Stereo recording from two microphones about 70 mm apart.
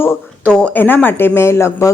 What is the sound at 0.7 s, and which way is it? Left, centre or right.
A woman's voice, left.